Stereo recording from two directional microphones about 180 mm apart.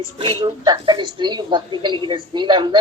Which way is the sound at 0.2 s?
30° right (ahead or behind).